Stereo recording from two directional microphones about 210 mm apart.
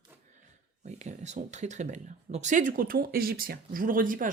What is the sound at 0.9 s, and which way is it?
Speech, 35° right (ahead or behind).